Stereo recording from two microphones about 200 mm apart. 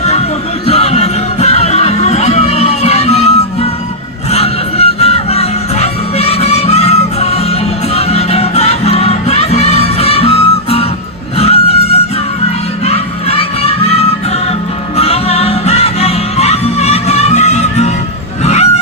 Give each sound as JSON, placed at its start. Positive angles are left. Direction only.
{"t": 0.0, "sound": "music", "side_deg": 35}
{"t": 14.9, "sound": "music", "side_deg": 30}
{"t": 18.4, "sound": "honk", "side_deg": 35}